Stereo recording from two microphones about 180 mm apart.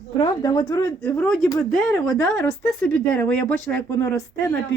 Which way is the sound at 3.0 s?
5° left (ahead or behind).